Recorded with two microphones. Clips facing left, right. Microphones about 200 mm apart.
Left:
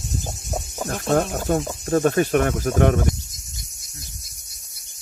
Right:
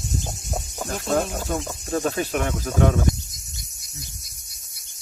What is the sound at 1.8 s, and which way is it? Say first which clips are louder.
Speech: left 6 dB; 55° left (ahead or behind).